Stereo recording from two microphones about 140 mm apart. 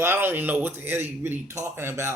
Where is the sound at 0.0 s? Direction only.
15° right (ahead or behind).